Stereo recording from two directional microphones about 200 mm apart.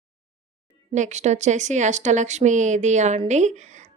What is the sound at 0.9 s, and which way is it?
Speech, 35° right (ahead or behind).